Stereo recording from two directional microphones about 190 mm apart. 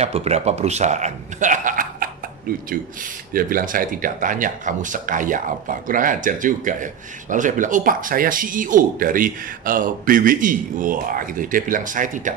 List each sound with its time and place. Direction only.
0.0 s a man's voice: 35° right (ahead or behind)
3.3 s speech: 50° right (ahead or behind)